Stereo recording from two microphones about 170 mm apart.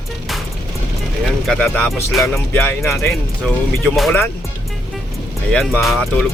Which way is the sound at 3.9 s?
Centre (ahead or behind).